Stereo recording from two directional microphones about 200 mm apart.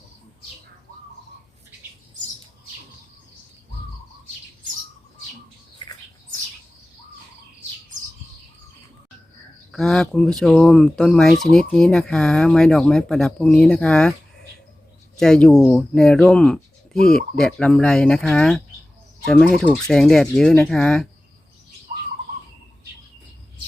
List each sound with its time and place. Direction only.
9.7 s speech: centre (ahead or behind)
15.2 s speech: 5° left (ahead or behind)